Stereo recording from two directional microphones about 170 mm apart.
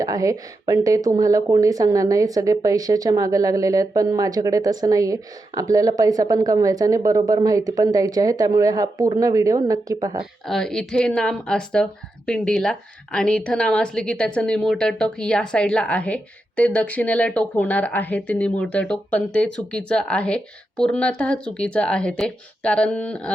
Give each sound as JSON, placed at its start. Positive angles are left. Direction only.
{"t": 0.0, "sound": "speech", "side_deg": -20}
{"t": 10.4, "sound": "speech", "side_deg": 5}